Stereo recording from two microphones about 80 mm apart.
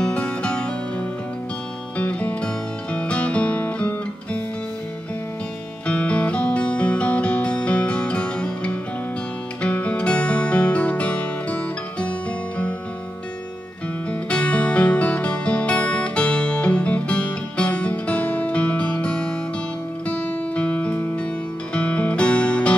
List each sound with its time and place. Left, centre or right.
0.0 s music: centre
5.9 s music: centre
14.3 s music: centre